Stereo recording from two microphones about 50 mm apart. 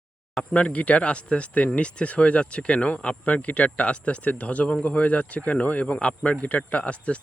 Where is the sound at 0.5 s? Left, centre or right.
Left.